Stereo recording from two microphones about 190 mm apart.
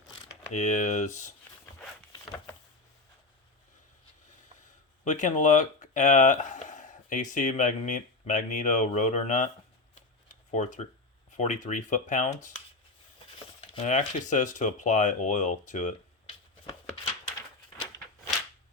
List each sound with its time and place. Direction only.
0.5 s speech: 40° left (ahead or behind)
5.0 s speech: 40° left (ahead or behind)
10.5 s speech: 40° left (ahead or behind)
13.7 s speech: 40° left (ahead or behind)